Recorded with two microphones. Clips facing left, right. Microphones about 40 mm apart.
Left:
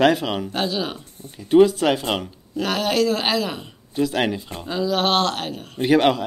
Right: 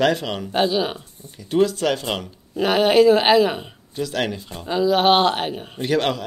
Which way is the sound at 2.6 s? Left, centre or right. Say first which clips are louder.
Right 5 dB; centre.